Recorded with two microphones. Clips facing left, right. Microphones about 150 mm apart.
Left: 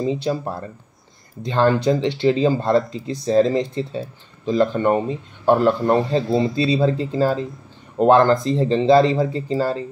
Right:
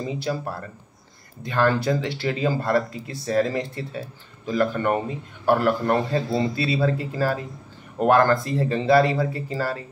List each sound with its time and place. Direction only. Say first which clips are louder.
0.0 s a man's voice: left 5 dB; 25° left (ahead or behind)